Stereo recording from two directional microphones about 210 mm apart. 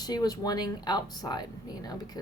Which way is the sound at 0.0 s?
20° left (ahead or behind).